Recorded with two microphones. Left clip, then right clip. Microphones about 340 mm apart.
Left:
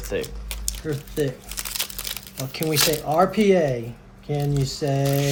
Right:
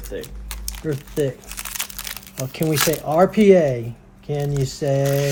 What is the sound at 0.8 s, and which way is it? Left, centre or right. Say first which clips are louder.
Speech: right 3 dB; right.